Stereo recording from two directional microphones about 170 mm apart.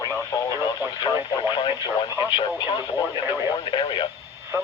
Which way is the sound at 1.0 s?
25° left (ahead or behind).